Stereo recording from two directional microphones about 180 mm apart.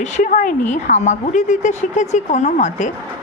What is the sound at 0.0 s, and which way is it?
A man's voice, 45° left (ahead or behind).